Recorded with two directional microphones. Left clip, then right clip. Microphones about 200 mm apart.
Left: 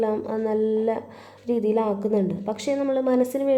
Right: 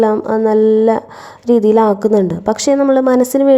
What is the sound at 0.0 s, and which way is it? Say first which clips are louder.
A woman's voice: right 12 dB; 35° right (ahead or behind).